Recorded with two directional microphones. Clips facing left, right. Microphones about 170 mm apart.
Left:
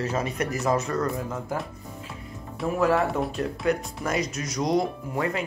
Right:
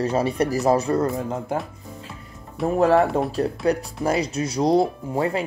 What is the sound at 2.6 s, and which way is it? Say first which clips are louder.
Speech: right 5 dB; 30° right (ahead or behind).